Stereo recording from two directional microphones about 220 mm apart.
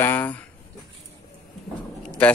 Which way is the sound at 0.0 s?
10° left (ahead or behind).